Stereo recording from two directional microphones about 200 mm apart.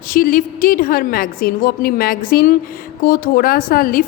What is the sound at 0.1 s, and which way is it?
A woman's voice, 45° left (ahead or behind).